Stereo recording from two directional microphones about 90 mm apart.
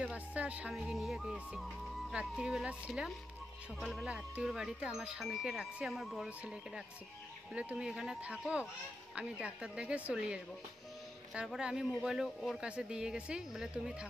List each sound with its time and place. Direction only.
0.0 s speech: 15° right (ahead or behind)
0.7 s speech: centre (ahead or behind)
6.4 s speech: 10° right (ahead or behind)